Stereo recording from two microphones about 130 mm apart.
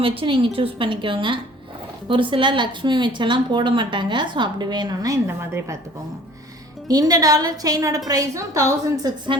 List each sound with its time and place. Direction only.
0.0 s a woman's voice: 45° right (ahead or behind); by 5.7 s 20° right (ahead or behind)
6.8 s a woman's voice: 30° right (ahead or behind)